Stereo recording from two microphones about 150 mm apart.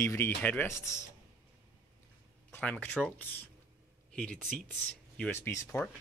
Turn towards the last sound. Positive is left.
turn(degrees=20)  # may be behind; listen again after turning